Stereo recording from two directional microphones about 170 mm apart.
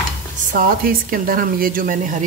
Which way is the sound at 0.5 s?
55° right (ahead or behind).